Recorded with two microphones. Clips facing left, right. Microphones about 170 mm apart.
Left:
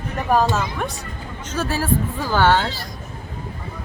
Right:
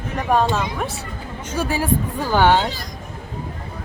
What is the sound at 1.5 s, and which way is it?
Speech, 15° right (ahead or behind).